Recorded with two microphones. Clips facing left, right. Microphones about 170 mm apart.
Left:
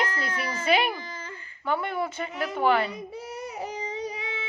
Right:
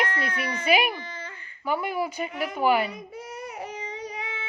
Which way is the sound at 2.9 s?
30° left (ahead or behind).